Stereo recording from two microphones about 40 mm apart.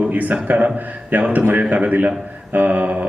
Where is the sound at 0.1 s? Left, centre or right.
Right.